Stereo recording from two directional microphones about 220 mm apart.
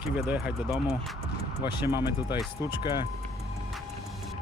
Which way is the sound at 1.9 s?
20° left (ahead or behind).